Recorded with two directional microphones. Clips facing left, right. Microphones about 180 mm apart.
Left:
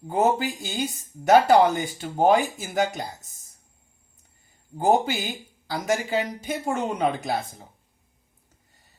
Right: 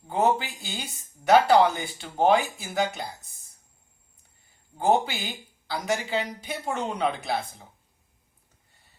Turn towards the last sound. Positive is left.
turn(degrees=45)  # may be behind; listen again after turning